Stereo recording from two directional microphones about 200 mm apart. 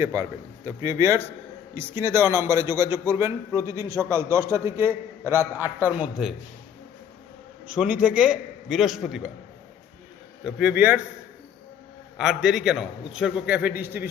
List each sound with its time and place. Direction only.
0.0 s a man's voice: 15° right (ahead or behind)
7.7 s a man's voice: 5° right (ahead or behind)
10.4 s a man's voice: 5° right (ahead or behind)
12.1 s a man's voice: centre (ahead or behind)